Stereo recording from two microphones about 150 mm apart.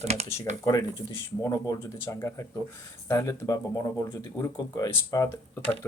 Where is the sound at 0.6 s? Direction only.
25° left (ahead or behind).